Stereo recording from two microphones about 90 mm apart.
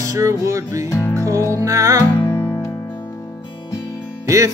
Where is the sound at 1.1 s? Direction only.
40° right (ahead or behind).